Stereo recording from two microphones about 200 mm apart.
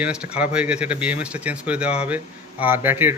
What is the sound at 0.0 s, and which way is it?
Speech, 5° right (ahead or behind).